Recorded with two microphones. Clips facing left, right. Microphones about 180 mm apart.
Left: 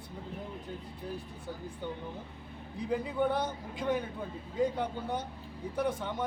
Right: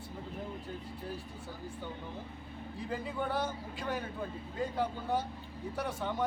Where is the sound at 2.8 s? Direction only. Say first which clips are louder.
Left 6 dB; 20° left (ahead or behind).